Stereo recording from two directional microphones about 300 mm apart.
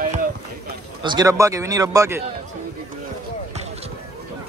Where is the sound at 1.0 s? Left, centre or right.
Centre.